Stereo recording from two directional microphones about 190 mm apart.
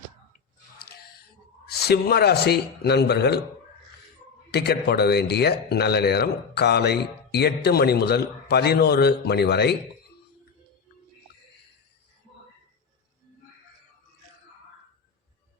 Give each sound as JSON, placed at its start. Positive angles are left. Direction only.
{"t": 1.9, "sound": "speech", "side_deg": 55}
{"t": 4.5, "sound": "speech", "side_deg": 60}